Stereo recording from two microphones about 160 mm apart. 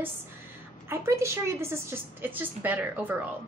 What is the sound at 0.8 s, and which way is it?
A woman's voice, 15° right (ahead or behind).